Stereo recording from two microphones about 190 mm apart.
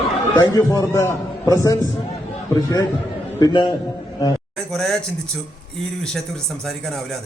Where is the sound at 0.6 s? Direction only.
15° left (ahead or behind).